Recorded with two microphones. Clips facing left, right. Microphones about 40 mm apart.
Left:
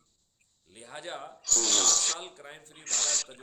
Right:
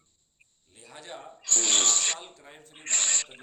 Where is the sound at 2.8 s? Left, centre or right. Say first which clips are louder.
Right 3 dB; right.